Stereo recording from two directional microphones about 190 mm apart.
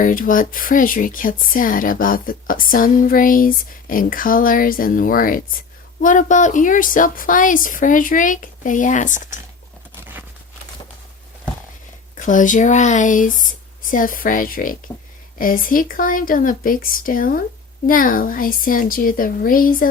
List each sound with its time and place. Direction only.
0.0 s speech: 45° left (ahead or behind)
12.1 s speech: 45° left (ahead or behind)